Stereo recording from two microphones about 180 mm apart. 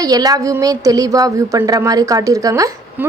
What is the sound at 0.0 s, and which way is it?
Speech, 20° right (ahead or behind).